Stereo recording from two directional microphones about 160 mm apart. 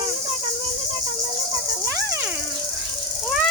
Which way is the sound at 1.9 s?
15° right (ahead or behind).